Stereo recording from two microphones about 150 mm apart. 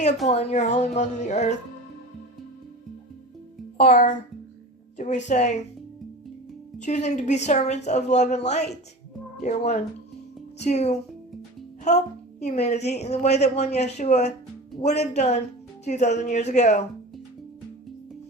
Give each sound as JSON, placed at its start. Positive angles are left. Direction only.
{"t": 0.3, "sound": "a woman's voice", "side_deg": 50}
{"t": 3.8, "sound": "a child's voice", "side_deg": 60}
{"t": 6.7, "sound": "a woman's voice", "side_deg": 50}